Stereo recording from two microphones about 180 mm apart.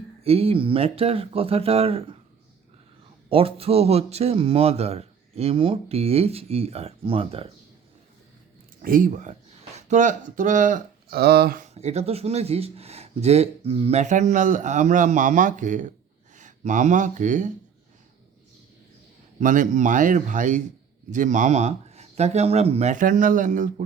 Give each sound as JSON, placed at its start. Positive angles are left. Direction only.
{"t": 0.2, "sound": "speech", "side_deg": -35}
{"t": 3.2, "sound": "speech", "side_deg": -30}
{"t": 8.8, "sound": "speech", "side_deg": -50}
{"t": 11.7, "sound": "speech", "side_deg": -35}
{"t": 19.4, "sound": "speech", "side_deg": -45}